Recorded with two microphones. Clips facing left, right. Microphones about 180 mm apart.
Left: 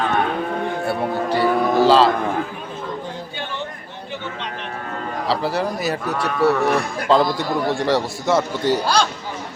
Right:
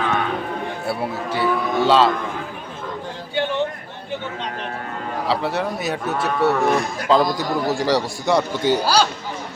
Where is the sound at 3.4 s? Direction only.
65° right (ahead or behind).